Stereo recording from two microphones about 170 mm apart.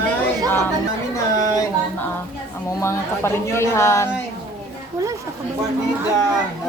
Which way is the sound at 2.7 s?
15° left (ahead or behind).